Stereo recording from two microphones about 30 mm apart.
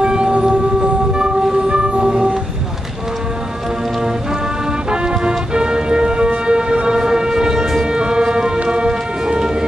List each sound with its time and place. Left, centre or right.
0.0 s whale vocalization: right
0.3 s whale vocalization: right
1.1 s music: right
4.8 s music: right
6.3 s civil defense siren: right
7.0 s civil defense siren: centre
7.8 s siren: right
8.7 s music: right